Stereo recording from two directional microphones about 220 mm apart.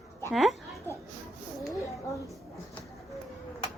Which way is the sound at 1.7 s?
15° left (ahead or behind).